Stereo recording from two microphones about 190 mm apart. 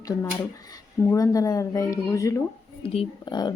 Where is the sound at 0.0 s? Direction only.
20° left (ahead or behind).